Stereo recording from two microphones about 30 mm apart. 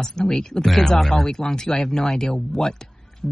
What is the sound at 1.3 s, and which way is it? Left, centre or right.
A woman's voice, left.